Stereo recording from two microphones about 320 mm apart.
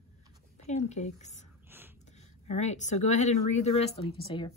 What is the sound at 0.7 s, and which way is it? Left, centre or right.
Speech, left.